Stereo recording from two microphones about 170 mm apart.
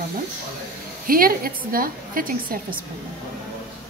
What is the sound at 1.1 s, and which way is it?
A woman's voice, 60° right (ahead or behind).